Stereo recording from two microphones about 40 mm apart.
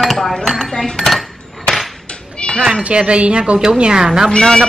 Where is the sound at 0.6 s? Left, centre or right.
Centre.